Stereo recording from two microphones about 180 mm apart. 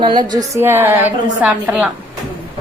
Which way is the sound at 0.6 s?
10° right (ahead or behind).